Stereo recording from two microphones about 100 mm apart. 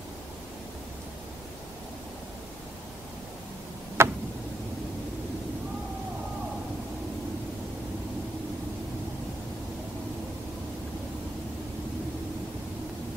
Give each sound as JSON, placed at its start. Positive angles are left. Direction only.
{"t": 4.0, "sound": "tick", "side_deg": -25}